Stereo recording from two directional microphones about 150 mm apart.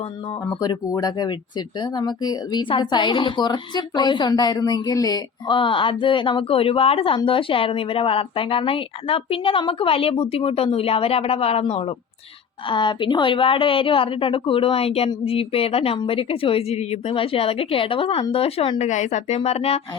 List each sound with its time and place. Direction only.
0.6 s speech: 25° left (ahead or behind)
18.8 s speech: 55° left (ahead or behind)